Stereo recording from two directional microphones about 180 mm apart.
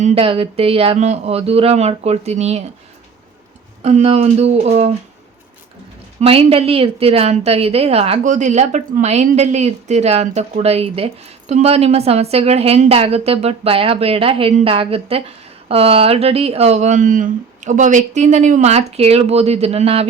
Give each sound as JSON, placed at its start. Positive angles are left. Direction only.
{"t": 0.0, "sound": "a woman's voice", "side_deg": -30}
{"t": 3.8, "sound": "a woman's voice", "side_deg": -35}
{"t": 6.1, "sound": "a woman's voice", "side_deg": -30}